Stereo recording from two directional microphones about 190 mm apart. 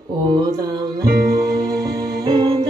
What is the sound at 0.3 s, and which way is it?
Music, 20° right (ahead or behind).